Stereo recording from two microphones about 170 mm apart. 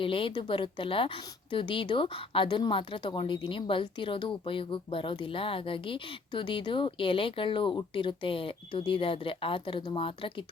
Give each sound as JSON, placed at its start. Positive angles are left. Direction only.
{"t": 0.0, "sound": "a woman's voice", "side_deg": 30}